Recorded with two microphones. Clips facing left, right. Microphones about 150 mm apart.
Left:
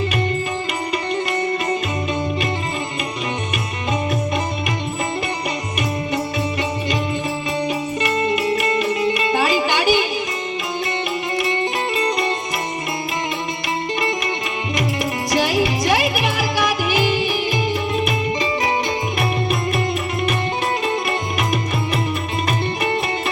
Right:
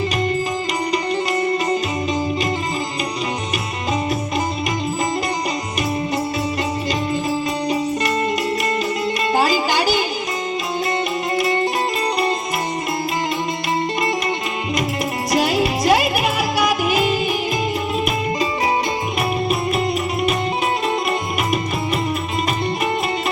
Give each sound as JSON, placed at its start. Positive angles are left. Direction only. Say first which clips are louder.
{"t": 7.7, "sound": "music", "louder": "right 2 dB", "side_deg": -35}
{"t": 11.3, "sound": "music", "louder": "right 3 dB", "side_deg": -35}
{"t": 15.3, "sound": "music", "louder": "right 1 dB", "side_deg": -30}